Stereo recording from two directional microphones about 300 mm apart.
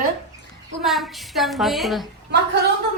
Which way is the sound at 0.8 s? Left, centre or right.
Centre.